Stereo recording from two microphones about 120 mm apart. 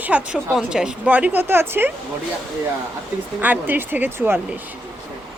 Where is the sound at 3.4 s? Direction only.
15° right (ahead or behind).